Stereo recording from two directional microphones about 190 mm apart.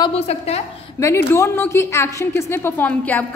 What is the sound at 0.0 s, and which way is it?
Speech, 35° left (ahead or behind).